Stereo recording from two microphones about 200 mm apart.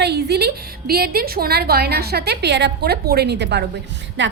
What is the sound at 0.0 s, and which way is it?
A woman's voice, 55° right (ahead or behind).